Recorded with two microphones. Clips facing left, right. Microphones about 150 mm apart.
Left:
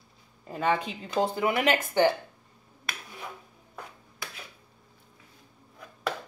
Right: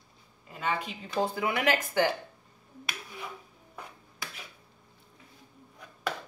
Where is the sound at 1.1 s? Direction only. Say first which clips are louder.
Left 3 dB; 25° left (ahead or behind).